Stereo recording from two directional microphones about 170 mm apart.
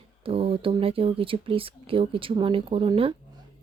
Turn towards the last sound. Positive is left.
turn(degrees=-35)  # may be behind; listen again after turning